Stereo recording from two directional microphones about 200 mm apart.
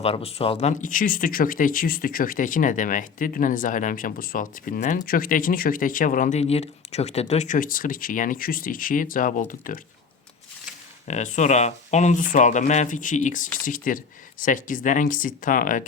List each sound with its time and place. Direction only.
0.0 s speech: 30° left (ahead or behind)
11.1 s speech: 35° left (ahead or behind)